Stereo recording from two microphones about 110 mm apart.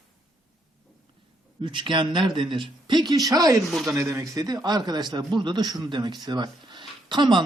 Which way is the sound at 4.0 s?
25° right (ahead or behind).